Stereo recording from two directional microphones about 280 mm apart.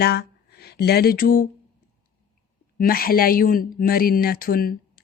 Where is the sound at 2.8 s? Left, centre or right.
Left.